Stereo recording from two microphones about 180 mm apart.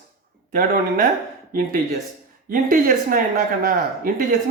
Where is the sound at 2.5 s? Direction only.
50° right (ahead or behind).